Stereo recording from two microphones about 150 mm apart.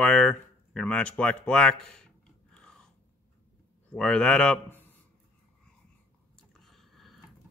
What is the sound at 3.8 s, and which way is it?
A man's voice, 5° left (ahead or behind).